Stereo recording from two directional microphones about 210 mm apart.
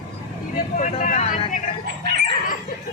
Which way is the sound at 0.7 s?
35° left (ahead or behind).